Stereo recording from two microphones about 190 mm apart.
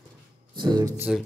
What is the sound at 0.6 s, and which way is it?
Speech, 20° right (ahead or behind).